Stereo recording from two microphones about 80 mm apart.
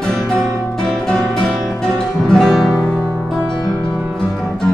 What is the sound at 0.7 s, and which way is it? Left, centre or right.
Music, centre.